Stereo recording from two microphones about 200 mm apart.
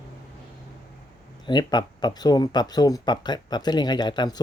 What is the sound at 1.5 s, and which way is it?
Speech, 20° left (ahead or behind).